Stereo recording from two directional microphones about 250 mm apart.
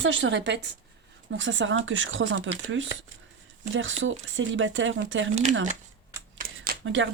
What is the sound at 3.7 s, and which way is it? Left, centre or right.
Speech, right.